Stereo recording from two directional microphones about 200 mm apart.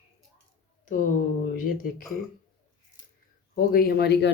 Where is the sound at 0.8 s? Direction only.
40° left (ahead or behind).